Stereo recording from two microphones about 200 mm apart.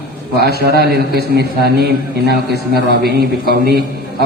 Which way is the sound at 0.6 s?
50° right (ahead or behind).